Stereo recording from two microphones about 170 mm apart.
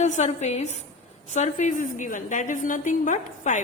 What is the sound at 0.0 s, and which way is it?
A woman's voice, 45° left (ahead or behind).